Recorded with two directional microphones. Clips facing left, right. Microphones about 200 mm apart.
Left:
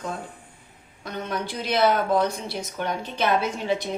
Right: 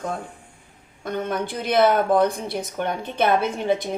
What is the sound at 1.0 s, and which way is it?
A woman's voice, 55° right (ahead or behind).